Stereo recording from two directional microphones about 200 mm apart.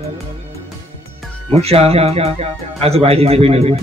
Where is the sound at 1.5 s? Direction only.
30° right (ahead or behind).